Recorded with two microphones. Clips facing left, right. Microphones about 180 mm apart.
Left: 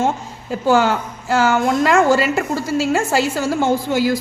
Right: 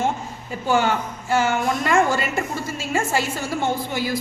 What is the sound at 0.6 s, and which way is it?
A woman's voice, 90° left.